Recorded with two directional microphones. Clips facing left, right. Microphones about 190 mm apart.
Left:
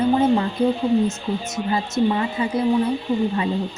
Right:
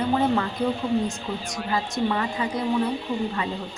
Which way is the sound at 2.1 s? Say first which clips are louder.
Left 4 dB; 20° left (ahead or behind).